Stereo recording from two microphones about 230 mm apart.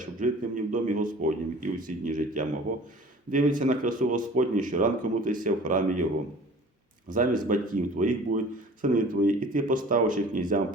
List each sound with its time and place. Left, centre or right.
0.0 s speech: right
7.4 s speech: right